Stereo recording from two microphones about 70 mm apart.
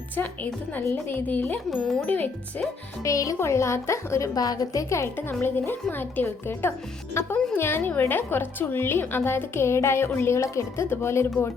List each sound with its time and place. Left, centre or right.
1.0 s a woman's voice: left
3.0 s a woman's voice: left
3.3 s a woman's voice: left
4.4 s speech: left
5.1 s a woman's voice: left